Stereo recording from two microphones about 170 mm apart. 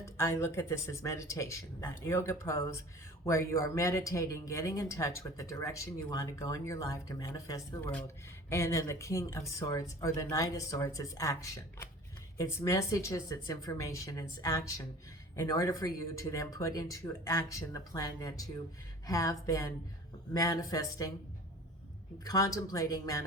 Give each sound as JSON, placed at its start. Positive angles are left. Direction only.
{"t": 0.0, "sound": "speech", "side_deg": 15}
{"t": 22.2, "sound": "speech", "side_deg": 20}